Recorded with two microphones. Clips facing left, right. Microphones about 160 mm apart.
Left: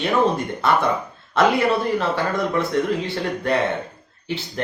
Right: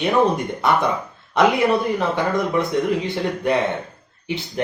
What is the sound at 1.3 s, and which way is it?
Speech, 20° right (ahead or behind).